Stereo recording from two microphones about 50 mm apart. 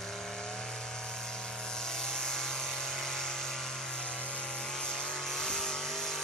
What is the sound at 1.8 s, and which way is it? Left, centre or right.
Vehicle, centre.